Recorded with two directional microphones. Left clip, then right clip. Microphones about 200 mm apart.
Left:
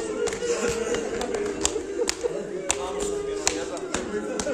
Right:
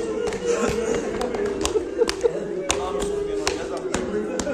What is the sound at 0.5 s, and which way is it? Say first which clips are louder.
Music: right 6 dB; 55° right (ahead or behind).